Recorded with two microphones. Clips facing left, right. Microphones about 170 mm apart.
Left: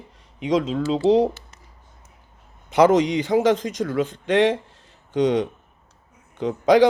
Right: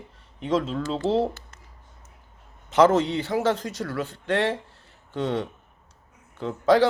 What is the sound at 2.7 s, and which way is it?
A man's voice, 15° left (ahead or behind).